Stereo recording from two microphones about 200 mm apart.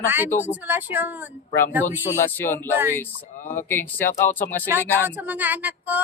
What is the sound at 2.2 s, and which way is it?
Speech, 10° left (ahead or behind).